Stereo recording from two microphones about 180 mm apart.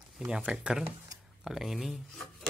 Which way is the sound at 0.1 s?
5° right (ahead or behind).